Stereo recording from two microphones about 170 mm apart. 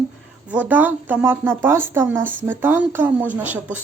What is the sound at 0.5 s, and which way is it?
Speech, 10° right (ahead or behind).